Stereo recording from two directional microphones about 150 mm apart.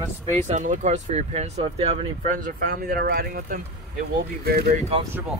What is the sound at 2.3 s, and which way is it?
Speech, 80° right.